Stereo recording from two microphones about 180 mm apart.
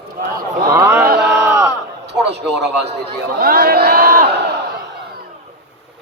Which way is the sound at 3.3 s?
55° right (ahead or behind).